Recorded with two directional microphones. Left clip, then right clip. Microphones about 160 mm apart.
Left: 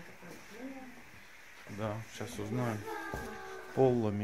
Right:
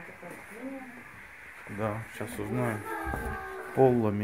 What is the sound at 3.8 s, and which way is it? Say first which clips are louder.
Speech: right 5 dB; 15° left (ahead or behind).